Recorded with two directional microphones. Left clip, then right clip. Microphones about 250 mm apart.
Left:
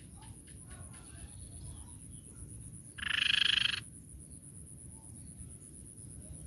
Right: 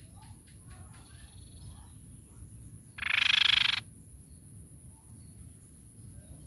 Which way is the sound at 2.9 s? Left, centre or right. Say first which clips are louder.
Right 4 dB; centre.